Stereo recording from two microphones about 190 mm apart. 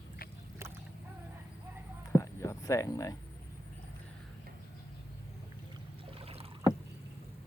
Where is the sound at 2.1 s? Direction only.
15° left (ahead or behind).